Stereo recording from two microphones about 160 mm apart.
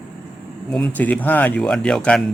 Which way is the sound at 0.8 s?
10° left (ahead or behind).